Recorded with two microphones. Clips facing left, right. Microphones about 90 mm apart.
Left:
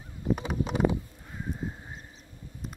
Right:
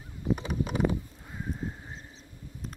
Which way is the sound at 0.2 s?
15° left (ahead or behind).